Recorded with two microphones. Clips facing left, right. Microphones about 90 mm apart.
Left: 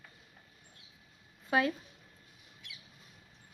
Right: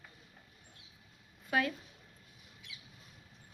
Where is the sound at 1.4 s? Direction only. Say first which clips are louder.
Left 3 dB; 25° left (ahead or behind).